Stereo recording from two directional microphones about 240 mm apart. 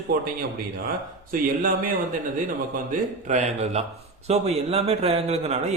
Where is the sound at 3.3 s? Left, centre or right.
Right.